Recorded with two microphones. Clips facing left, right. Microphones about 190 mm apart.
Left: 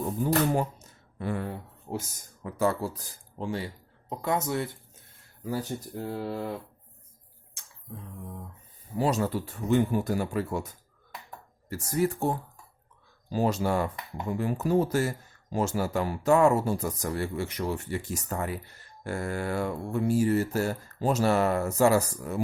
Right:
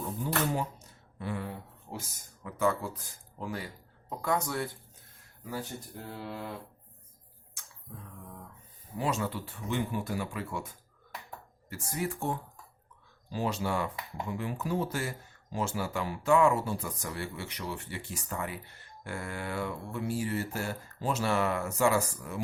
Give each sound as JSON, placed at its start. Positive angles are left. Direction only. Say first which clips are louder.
{"t": 1.2, "sound": "speech", "louder": "left 4 dB", "side_deg": 50}
{"t": 2.4, "sound": "speech", "louder": "left 3 dB", "side_deg": 35}
{"t": 5.5, "sound": "speech", "louder": "left 6 dB", "side_deg": 40}
{"t": 9.0, "sound": "speech", "louder": "left 6 dB", "side_deg": 40}